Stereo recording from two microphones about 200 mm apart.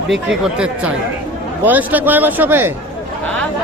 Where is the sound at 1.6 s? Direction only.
10° right (ahead or behind).